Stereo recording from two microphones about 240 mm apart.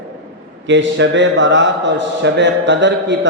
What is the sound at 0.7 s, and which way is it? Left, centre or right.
A man's voice, right.